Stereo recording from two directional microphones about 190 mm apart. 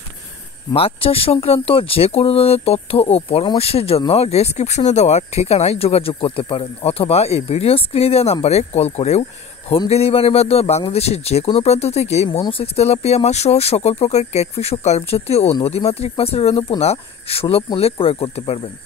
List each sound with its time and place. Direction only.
0.7 s speech: 30° left (ahead or behind)